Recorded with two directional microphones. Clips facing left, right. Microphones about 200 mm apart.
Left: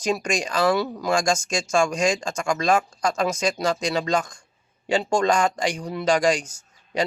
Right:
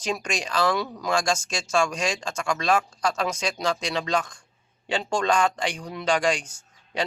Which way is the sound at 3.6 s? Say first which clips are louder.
Left 1 dB; 40° left (ahead or behind).